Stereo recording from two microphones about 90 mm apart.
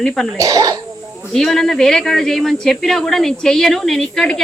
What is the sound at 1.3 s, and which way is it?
Speech, 5° left (ahead or behind).